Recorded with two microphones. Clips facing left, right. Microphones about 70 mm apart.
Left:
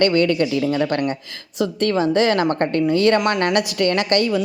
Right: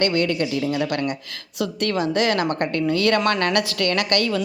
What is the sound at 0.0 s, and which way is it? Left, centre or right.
A woman's voice, left.